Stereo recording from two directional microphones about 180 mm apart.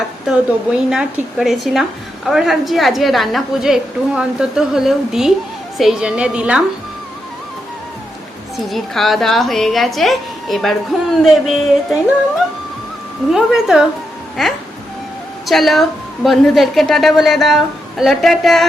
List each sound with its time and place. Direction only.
0.3 s speech: 5° right (ahead or behind)
8.7 s speech: centre (ahead or behind)
13.3 s speech: 5° right (ahead or behind)